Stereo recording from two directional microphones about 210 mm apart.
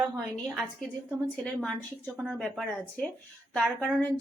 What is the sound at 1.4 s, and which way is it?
A woman's voice, 5° left (ahead or behind).